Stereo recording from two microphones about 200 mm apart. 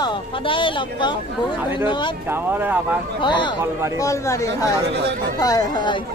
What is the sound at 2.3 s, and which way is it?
Speech, 10° right (ahead or behind).